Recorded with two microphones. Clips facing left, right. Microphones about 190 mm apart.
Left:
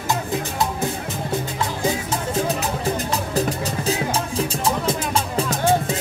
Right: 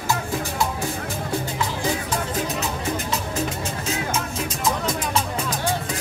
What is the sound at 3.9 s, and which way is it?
Music, 35° left (ahead or behind).